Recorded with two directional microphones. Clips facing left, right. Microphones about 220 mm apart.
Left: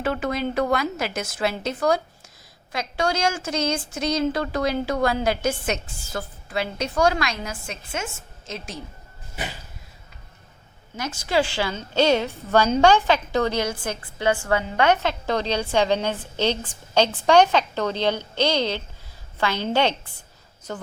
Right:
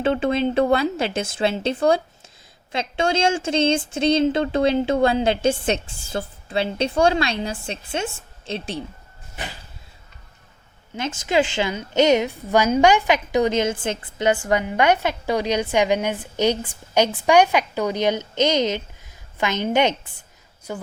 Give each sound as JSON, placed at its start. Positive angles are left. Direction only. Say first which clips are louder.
{"t": 0.0, "sound": "a woman's voice", "louder": "right 5 dB", "side_deg": -25}
{"t": 10.9, "sound": "a woman's voice", "louder": "right 2 dB", "side_deg": -20}